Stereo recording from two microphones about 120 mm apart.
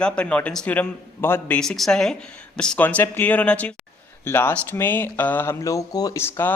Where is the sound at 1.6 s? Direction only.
5° left (ahead or behind).